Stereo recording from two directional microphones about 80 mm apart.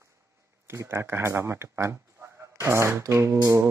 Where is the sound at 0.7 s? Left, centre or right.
Right.